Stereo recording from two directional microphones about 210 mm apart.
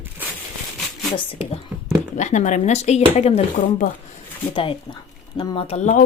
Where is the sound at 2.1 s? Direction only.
35° left (ahead or behind).